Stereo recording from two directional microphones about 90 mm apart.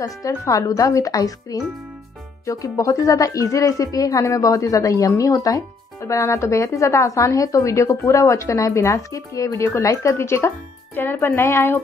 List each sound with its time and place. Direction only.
0.0 s a woman's voice: 40° left (ahead or behind)